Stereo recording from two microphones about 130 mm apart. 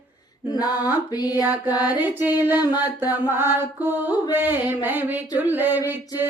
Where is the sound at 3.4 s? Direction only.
15° right (ahead or behind).